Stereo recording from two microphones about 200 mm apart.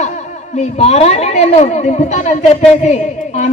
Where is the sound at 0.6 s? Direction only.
35° left (ahead or behind).